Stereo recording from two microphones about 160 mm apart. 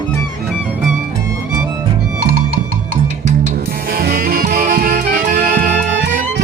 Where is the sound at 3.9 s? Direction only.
70° right (ahead or behind).